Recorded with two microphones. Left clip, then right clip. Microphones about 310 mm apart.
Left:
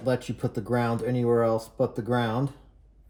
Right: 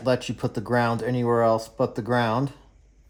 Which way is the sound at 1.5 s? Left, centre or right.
Centre.